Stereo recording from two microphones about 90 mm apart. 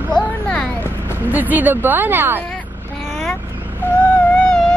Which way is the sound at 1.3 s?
20° right (ahead or behind).